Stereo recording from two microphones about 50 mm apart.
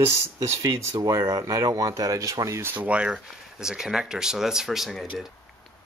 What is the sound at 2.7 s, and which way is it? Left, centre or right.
Speech, right.